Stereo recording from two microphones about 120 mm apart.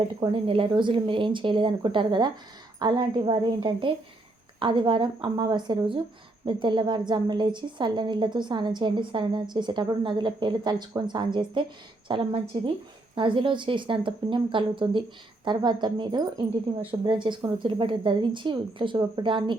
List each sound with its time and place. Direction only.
0.3 s a woman's voice: 50° right (ahead or behind)